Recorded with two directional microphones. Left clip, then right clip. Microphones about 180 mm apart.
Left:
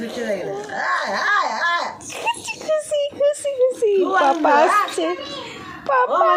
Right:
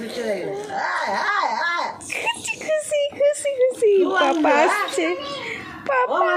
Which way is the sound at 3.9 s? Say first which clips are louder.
Left 1 dB; 5° right (ahead or behind).